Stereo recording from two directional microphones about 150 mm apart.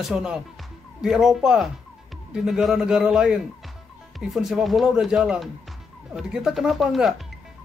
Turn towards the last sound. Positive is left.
turn(degrees=0)  # may be behind; listen again after turning